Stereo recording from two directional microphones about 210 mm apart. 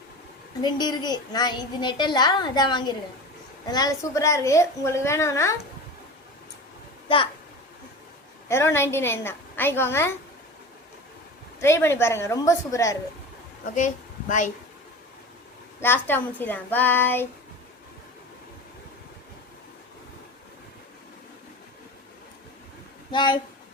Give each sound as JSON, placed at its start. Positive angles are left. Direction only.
{"t": 0.6, "sound": "a woman's voice", "side_deg": 20}
{"t": 8.4, "sound": "a woman's voice", "side_deg": 10}
{"t": 11.6, "sound": "a woman's voice", "side_deg": 10}
{"t": 13.7, "sound": "a woman's voice", "side_deg": 35}
{"t": 15.8, "sound": "a woman's voice", "side_deg": 10}
{"t": 23.1, "sound": "a woman's voice", "side_deg": 20}